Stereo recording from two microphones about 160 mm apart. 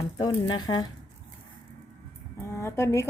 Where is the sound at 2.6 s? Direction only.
15° left (ahead or behind).